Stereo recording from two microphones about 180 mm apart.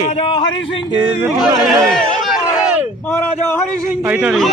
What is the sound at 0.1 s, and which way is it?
Speech, 30° left (ahead or behind).